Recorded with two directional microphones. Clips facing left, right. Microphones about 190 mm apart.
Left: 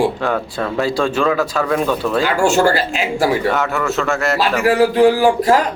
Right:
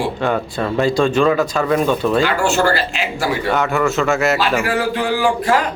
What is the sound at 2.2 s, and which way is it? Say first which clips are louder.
Speech: left 2 dB; 45° left (ahead or behind).